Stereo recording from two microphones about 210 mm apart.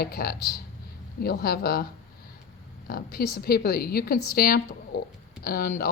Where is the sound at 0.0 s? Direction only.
45° left (ahead or behind).